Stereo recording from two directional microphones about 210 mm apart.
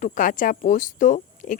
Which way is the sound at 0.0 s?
40° left (ahead or behind).